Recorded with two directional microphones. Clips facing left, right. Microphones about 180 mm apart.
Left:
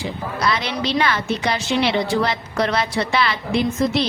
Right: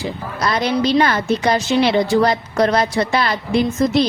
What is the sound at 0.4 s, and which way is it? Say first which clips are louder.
A woman's voice: right 5 dB; 45° right (ahead or behind).